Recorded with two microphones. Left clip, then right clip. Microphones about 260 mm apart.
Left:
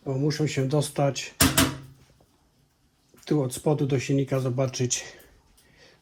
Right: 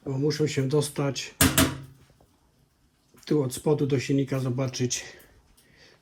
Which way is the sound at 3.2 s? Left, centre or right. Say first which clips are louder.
Even; centre.